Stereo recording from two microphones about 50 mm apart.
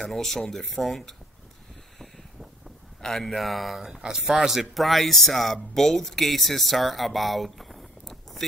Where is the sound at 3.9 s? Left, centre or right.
Centre.